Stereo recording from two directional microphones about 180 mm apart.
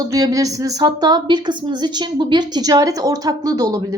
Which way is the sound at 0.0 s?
20° right (ahead or behind).